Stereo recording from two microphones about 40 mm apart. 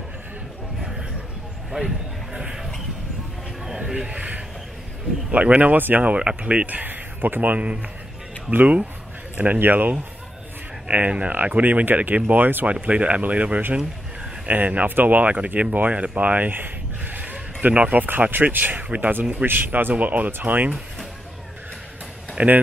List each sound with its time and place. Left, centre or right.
0.7 s a sound: centre
1.7 s speech: centre
3.6 s a sound: centre
3.9 s speech: right
5.3 s speech: right
5.8 s speech: right
6.0 s speech: right
10.9 s speech: right
11.8 s speech: right
12.8 s speech: right
15.3 s speech: right
22.4 s speech: right